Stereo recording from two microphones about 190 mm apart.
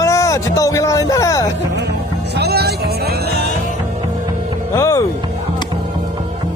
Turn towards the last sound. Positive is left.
turn(degrees=15)  # may be behind; listen again after turning